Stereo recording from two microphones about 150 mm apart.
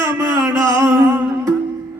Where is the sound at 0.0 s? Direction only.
20° right (ahead or behind).